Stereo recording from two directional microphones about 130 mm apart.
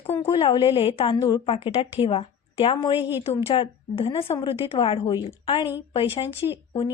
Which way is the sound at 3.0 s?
15° right (ahead or behind).